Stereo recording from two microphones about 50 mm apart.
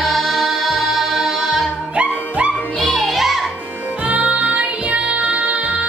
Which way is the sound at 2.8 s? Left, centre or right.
Centre.